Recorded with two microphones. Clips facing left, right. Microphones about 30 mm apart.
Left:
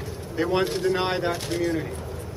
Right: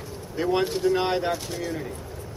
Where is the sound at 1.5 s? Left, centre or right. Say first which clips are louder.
Left 6 dB; left.